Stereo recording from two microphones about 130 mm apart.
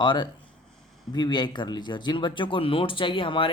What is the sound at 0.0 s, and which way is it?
Speech, 35° left (ahead or behind).